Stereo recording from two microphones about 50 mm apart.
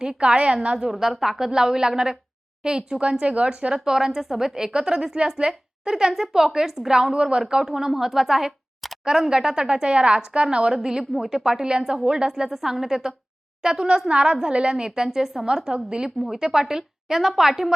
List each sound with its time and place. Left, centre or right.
0.0 s speech: centre
0.9 s a woman's voice: centre
3.8 s a woman's voice: centre
10.8 s a woman's voice: centre